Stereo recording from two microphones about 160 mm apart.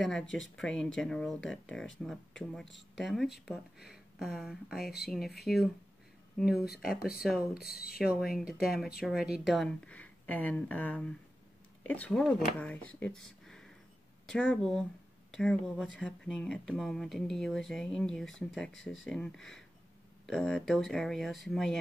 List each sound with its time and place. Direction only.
0.0 s speech: 5° left (ahead or behind)
7.6 s speech: 70° left (ahead or behind)
8.0 s speech: 5° right (ahead or behind)